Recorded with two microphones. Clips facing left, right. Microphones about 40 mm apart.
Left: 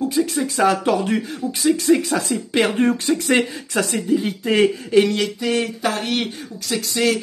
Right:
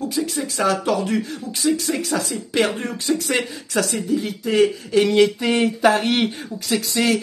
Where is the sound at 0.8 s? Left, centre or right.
Left.